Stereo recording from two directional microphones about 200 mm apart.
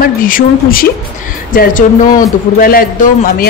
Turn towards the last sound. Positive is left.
turn(degrees=45)  # may be behind; listen again after turning